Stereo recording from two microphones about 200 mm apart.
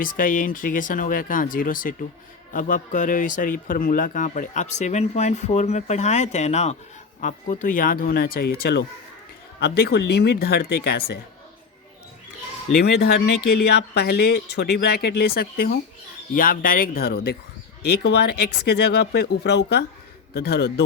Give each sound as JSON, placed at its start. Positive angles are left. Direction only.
{"t": 0.0, "sound": "a man's voice", "side_deg": 45}
{"t": 12.7, "sound": "speech", "side_deg": 55}